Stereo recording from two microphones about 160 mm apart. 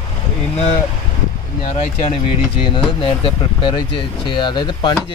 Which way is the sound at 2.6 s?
30° left (ahead or behind).